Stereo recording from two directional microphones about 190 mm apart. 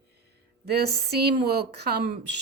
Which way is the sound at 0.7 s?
60° right (ahead or behind).